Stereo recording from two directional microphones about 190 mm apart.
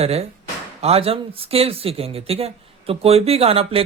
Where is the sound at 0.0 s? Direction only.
30° right (ahead or behind).